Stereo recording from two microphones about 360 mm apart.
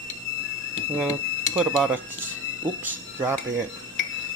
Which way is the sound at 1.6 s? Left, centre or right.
Centre.